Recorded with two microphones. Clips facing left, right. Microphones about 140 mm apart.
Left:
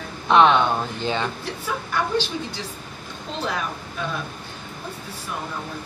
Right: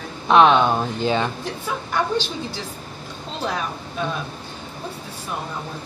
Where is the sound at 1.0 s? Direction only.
15° right (ahead or behind).